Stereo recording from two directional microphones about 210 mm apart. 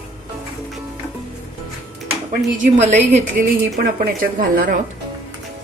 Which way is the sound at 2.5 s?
35° right (ahead or behind).